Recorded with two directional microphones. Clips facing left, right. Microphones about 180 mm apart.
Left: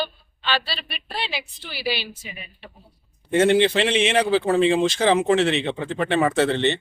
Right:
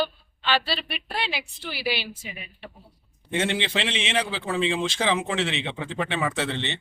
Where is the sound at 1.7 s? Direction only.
15° right (ahead or behind).